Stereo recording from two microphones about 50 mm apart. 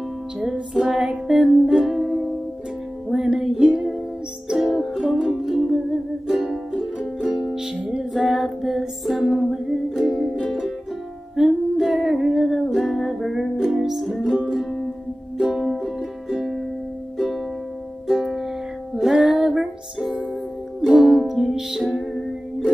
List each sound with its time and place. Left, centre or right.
0.4 s music: centre
7.0 s music: centre
8.0 s music: centre
11.3 s music: centre
14.3 s music: centre
15.7 s music: centre
16.3 s music: centre
18.0 s music: centre